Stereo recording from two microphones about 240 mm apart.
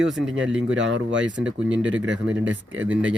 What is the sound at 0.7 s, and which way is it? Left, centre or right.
Speech, right.